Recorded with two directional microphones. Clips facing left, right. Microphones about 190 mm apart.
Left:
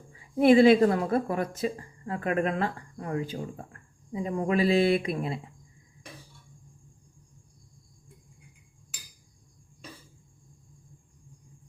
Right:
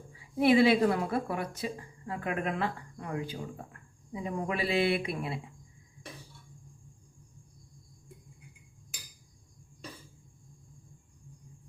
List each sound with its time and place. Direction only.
0.3 s a woman's voice: 50° left (ahead or behind)
4.1 s a woman's voice: 40° left (ahead or behind)